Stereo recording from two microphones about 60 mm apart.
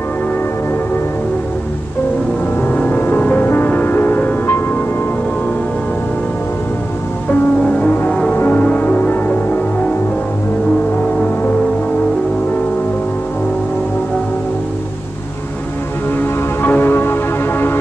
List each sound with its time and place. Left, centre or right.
2.7 s music: left
8.3 s music: left
16.2 s music: left